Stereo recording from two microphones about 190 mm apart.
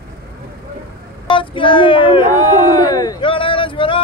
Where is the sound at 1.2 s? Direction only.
25° left (ahead or behind).